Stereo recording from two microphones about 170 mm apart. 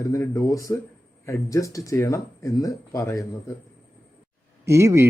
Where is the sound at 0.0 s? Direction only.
20° left (ahead or behind).